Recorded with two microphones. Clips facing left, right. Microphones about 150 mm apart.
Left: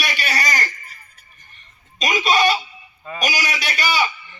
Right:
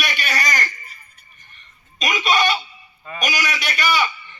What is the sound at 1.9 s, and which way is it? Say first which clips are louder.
A man's voice: left 2 dB; 35° left (ahead or behind).